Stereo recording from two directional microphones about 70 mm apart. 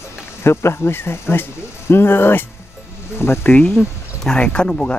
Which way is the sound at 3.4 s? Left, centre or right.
Left.